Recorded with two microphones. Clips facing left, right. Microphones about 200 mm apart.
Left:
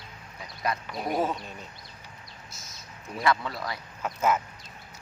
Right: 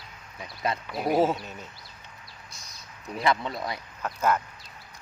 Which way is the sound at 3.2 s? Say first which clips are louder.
Even; 20° right (ahead or behind).